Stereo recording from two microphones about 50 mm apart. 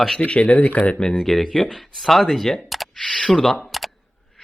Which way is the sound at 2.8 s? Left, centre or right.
Centre.